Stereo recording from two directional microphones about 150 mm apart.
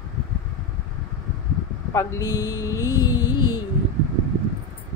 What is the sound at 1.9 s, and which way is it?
Music, 20° left (ahead or behind).